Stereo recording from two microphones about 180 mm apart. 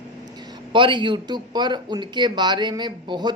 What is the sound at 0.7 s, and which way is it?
Speech, 25° right (ahead or behind).